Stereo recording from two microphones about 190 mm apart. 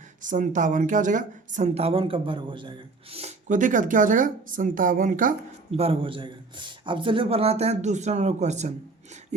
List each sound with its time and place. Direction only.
0.2 s a woman's voice: 40° right (ahead or behind)
5.7 s a woman's voice: 30° right (ahead or behind)